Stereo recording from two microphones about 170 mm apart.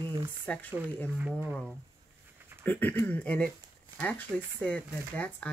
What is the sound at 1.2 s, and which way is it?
Speech, 10° right (ahead or behind).